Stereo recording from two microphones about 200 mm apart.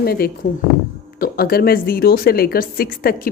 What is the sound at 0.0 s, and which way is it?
Speech, 50° left (ahead or behind).